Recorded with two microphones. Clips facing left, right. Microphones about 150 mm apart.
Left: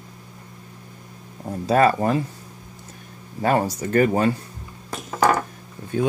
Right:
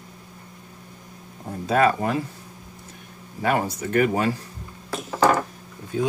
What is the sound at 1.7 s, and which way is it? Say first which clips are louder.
Speech: left 2 dB; 40° left (ahead or behind).